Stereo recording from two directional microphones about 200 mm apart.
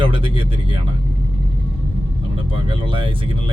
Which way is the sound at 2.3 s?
25° right (ahead or behind).